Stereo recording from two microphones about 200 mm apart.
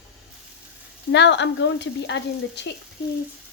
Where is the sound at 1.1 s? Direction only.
60° left (ahead or behind).